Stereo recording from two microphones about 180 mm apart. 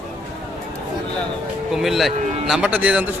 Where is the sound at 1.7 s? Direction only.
Centre (ahead or behind).